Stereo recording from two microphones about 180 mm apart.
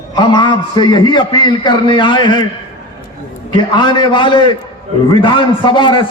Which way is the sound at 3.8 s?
25° left (ahead or behind).